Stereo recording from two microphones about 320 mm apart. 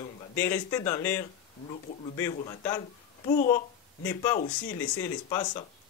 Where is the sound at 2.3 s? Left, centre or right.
Centre.